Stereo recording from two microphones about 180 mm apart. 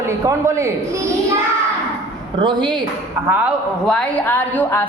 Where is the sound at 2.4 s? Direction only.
25° right (ahead or behind).